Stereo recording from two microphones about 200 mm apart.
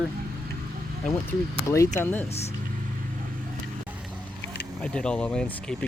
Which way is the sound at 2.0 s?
10° left (ahead or behind).